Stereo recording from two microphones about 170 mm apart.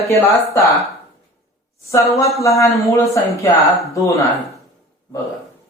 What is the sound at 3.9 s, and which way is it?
Speech, 20° left (ahead or behind).